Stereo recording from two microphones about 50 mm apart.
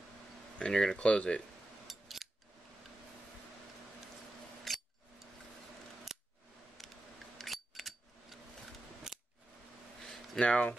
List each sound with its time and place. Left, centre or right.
0.6 s speech: centre
1.9 s scissors: centre
4.7 s a sound: centre
6.8 s a sound: centre
9.1 s scissors: centre
10.4 s speech: left